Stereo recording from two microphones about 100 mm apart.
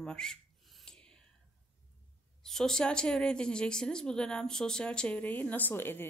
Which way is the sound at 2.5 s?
5° left (ahead or behind).